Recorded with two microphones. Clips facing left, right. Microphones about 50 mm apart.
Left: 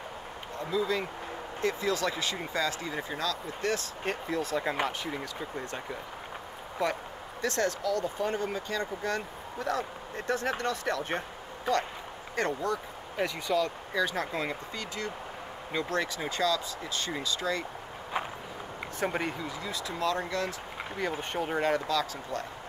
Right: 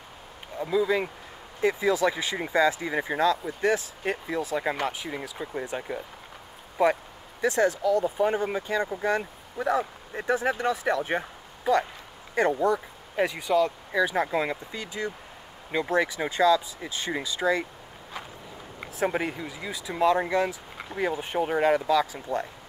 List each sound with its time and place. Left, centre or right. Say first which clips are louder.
0.6 s speech: right 5 dB; centre
7.4 s speech: right 6 dB; centre
12.5 s speech: right 7 dB; right
18.1 s walk: left 6 dB; left
18.8 s speech: right 4 dB; centre